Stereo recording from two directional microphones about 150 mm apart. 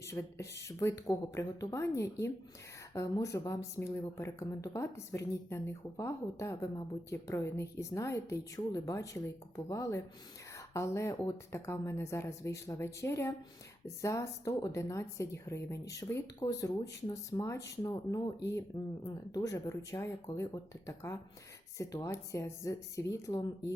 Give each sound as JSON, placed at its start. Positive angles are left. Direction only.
{"t": 0.0, "sound": "a woman's voice", "side_deg": 20}